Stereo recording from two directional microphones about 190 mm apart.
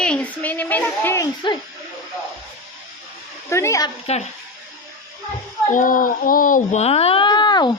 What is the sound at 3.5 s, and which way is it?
Speech, 15° left (ahead or behind).